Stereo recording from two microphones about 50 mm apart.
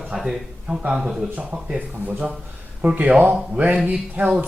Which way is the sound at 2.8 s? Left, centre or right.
Right.